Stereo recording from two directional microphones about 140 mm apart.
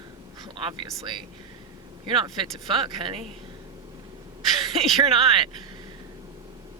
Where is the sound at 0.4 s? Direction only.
30° right (ahead or behind).